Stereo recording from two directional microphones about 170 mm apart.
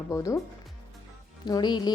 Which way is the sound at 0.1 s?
20° left (ahead or behind).